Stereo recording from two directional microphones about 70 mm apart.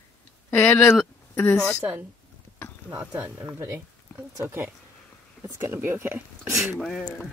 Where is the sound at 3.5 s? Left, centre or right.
Right.